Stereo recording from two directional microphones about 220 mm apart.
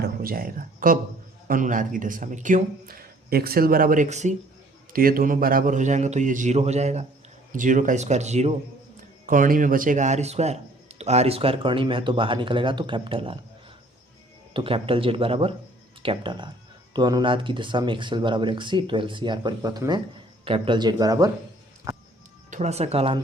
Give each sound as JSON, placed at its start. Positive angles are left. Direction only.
{"t": 0.0, "sound": "a man's voice", "side_deg": -40}
{"t": 14.5, "sound": "a man's voice", "side_deg": -25}
{"t": 21.9, "sound": "music", "side_deg": -15}
{"t": 22.4, "sound": "speech", "side_deg": -35}